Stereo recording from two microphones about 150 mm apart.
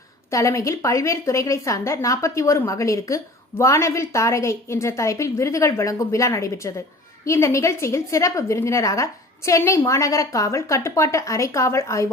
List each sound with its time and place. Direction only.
0.3 s a woman's voice: 20° left (ahead or behind)